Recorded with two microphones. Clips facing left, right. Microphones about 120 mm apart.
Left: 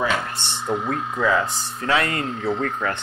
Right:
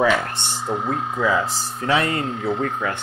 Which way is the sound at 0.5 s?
35° right (ahead or behind).